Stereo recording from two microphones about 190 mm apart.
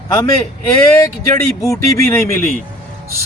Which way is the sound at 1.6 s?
15° left (ahead or behind).